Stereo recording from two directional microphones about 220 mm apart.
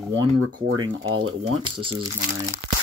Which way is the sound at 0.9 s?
65° right (ahead or behind).